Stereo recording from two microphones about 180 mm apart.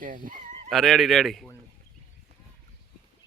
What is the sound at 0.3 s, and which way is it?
Fowl, 45° right (ahead or behind).